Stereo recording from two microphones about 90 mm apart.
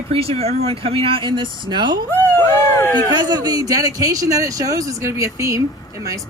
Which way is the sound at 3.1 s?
50° right (ahead or behind).